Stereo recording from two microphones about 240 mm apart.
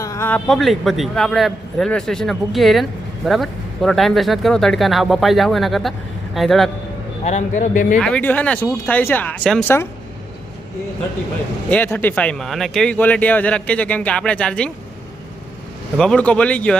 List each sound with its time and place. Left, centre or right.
0.0 s speech: centre
7.3 s a man's voice: left
7.9 s speech: centre
11.7 s speech: centre
16.0 s speech: centre